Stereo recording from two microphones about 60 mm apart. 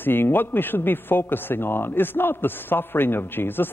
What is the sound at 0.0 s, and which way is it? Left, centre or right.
A man's voice, left.